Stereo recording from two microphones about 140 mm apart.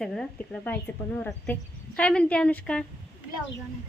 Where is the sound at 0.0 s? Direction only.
5° left (ahead or behind).